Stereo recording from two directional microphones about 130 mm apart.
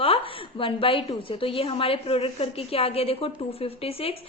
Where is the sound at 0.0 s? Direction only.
45° left (ahead or behind).